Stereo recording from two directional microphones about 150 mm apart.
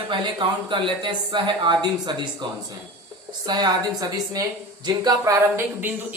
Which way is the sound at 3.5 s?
25° right (ahead or behind).